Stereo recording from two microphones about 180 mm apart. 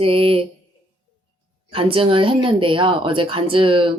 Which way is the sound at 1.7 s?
30° right (ahead or behind).